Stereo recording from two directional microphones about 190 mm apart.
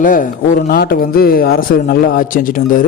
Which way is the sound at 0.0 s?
45° left (ahead or behind).